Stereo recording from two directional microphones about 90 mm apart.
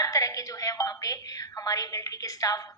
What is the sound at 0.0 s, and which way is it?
A woman's voice, 40° left (ahead or behind).